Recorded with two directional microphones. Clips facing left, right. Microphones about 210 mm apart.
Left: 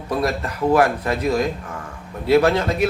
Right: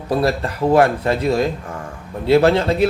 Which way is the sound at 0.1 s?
30° right (ahead or behind).